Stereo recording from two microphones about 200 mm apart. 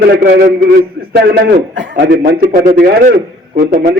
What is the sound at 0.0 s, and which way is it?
A man's voice, 55° right (ahead or behind).